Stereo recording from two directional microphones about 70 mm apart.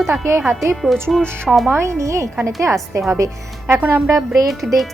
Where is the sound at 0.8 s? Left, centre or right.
Centre.